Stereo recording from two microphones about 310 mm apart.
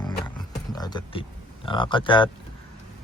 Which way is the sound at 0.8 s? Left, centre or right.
Centre.